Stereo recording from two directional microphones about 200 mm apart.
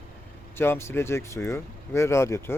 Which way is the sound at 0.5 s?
10° left (ahead or behind).